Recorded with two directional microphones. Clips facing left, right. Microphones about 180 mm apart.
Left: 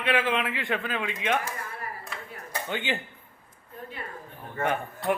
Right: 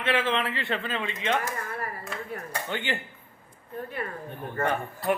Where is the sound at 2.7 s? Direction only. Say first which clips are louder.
Left 1 dB; 15° left (ahead or behind).